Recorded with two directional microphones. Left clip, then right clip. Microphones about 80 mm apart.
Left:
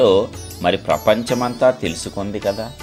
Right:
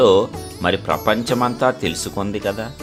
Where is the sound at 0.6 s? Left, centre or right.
Centre.